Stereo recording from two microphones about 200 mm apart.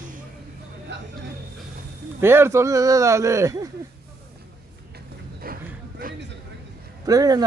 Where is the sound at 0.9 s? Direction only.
60° right (ahead or behind).